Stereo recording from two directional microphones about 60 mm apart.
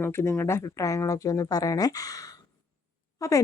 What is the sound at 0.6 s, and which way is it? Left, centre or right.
Speech, left.